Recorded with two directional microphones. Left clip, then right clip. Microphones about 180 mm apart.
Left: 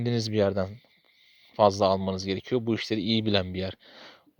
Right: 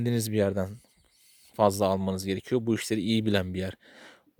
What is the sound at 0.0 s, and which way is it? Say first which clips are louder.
Speech: left 2 dB; 30° right (ahead or behind).